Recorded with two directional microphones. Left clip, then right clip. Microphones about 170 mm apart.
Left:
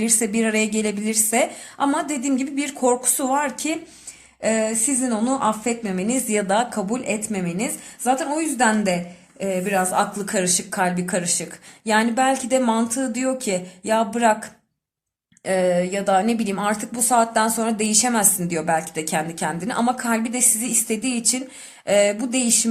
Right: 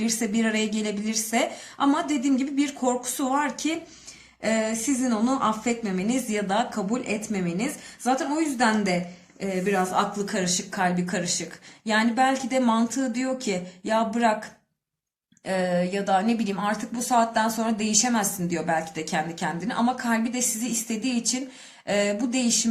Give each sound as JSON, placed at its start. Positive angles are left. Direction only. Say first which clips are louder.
{"t": 0.0, "sound": "a woman's voice", "louder": "left 4 dB", "side_deg": 40}